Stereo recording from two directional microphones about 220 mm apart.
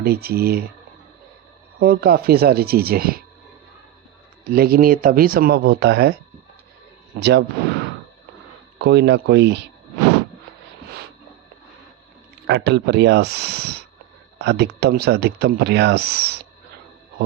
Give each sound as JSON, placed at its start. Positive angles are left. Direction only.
{"t": 0.0, "sound": "speech", "side_deg": -45}
{"t": 1.8, "sound": "speech", "side_deg": -45}
{"t": 4.5, "sound": "speech", "side_deg": -45}
{"t": 7.2, "sound": "speech", "side_deg": -50}
{"t": 8.8, "sound": "speech", "side_deg": -50}
{"t": 12.5, "sound": "speech", "side_deg": -50}